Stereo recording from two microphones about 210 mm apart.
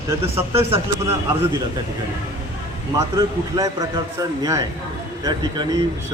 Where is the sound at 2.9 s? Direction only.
15° right (ahead or behind).